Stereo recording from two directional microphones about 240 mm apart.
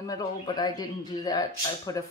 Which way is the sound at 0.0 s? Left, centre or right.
Centre.